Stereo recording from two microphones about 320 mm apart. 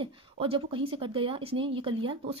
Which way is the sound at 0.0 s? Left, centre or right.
Centre.